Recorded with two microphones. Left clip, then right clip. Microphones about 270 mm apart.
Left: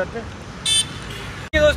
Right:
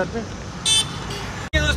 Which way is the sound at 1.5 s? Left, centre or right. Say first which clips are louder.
Left 6 dB; centre.